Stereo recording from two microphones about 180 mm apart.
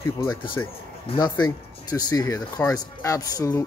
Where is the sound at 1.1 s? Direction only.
30° left (ahead or behind).